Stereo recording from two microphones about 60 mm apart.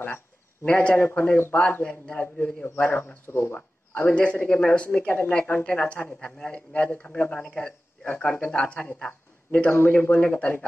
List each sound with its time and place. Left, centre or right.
0.7 s speech: left
3.3 s speech: left
3.5 s speech: left
6.0 s speech: centre
9.7 s speech: left